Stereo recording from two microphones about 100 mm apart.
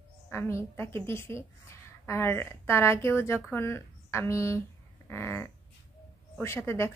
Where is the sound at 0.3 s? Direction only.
25° left (ahead or behind).